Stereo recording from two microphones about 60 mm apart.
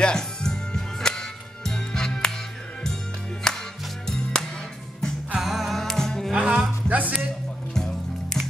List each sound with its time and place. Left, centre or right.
0.0 s music: centre
3.4 s music: centre
5.4 s music: centre
6.3 s music: centre
6.9 s music: right
7.7 s music: centre